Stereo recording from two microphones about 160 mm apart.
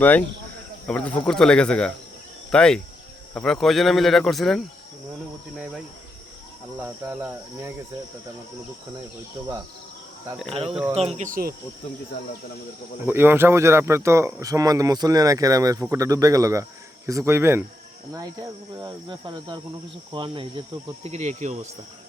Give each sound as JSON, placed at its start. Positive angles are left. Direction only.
{"t": 0.0, "sound": "speech", "side_deg": 10}
{"t": 6.8, "sound": "cricket", "side_deg": -15}
{"t": 10.5, "sound": "speech", "side_deg": -35}
{"t": 11.3, "sound": "speech", "side_deg": -65}
{"t": 13.1, "sound": "speech", "side_deg": -15}
{"t": 17.1, "sound": "cricket", "side_deg": -20}
{"t": 18.1, "sound": "speech", "side_deg": -20}
{"t": 21.0, "sound": "speech", "side_deg": -45}